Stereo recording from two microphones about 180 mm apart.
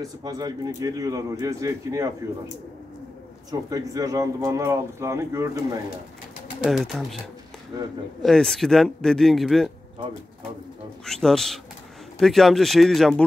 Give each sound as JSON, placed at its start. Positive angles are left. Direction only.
{"t": 0.0, "sound": "speech", "side_deg": -20}
{"t": 3.7, "sound": "speech", "side_deg": -20}
{"t": 6.6, "sound": "speech", "side_deg": 0}
{"t": 8.2, "sound": "speech", "side_deg": 0}
{"t": 11.1, "sound": "speech", "side_deg": 0}